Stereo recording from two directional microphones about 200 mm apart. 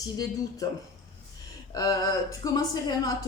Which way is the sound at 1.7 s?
20° left (ahead or behind).